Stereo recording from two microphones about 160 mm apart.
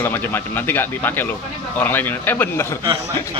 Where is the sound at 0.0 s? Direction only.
15° left (ahead or behind).